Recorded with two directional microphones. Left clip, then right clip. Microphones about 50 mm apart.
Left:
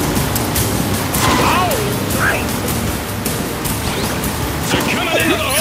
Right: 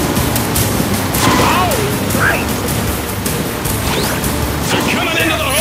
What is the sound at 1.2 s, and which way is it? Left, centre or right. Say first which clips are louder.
Music: right 2 dB; right.